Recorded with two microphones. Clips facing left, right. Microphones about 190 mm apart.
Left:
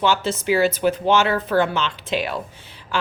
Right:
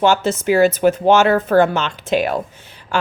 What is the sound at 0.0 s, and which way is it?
Speech, 45° right (ahead or behind).